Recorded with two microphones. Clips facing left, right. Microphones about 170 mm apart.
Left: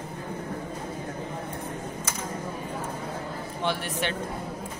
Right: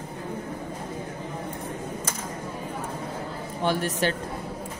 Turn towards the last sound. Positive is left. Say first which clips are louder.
# right 4 dB
turn(degrees=-40)  # may be behind; listen again after turning